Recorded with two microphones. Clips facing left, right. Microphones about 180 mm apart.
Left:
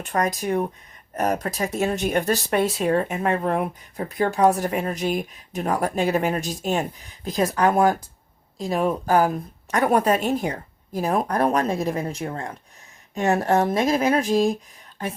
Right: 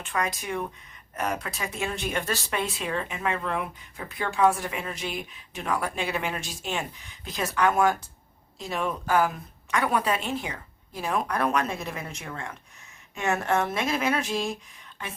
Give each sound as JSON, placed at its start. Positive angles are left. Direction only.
{"t": 0.0, "sound": "speech", "side_deg": 40}